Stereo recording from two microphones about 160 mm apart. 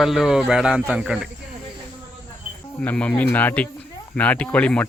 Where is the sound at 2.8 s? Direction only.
10° left (ahead or behind).